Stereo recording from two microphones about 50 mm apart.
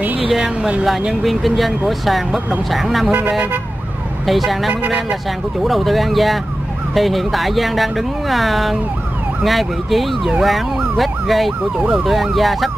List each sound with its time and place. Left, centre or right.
1.2 s speech: centre
3.2 s speech: right
4.3 s speech: centre
4.6 s speech: right
5.6 s speech: centre